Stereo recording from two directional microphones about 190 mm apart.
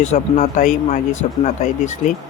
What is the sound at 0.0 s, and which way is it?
Speech, 40° left (ahead or behind).